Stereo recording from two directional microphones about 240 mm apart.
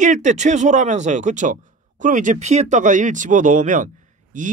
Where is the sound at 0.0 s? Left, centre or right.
Right.